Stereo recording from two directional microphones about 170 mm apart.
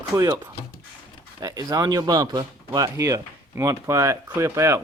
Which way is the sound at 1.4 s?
20° right (ahead or behind).